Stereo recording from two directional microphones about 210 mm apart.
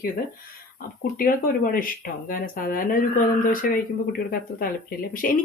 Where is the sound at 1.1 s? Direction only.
40° left (ahead or behind).